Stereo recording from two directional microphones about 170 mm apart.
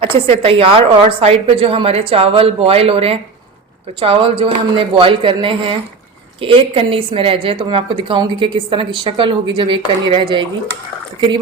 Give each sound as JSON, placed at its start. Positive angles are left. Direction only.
{"t": 0.0, "sound": "a woman's voice", "side_deg": -35}